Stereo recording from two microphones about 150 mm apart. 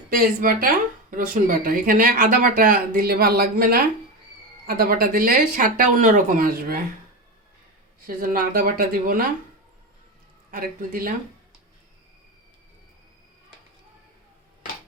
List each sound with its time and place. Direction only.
0.1 s speech: 70° right (ahead or behind)
8.0 s speech: 70° right (ahead or behind)
10.5 s speech: 70° right (ahead or behind)